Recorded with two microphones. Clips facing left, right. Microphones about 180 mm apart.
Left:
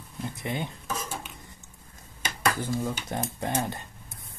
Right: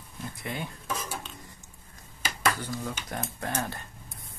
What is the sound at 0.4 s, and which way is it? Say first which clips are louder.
Dishes: left 3 dB; 20° left (ahead or behind).